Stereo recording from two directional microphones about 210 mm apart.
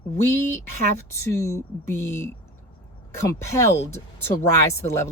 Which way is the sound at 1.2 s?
10° left (ahead or behind).